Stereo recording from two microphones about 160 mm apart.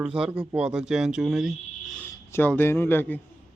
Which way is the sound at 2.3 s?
15° left (ahead or behind).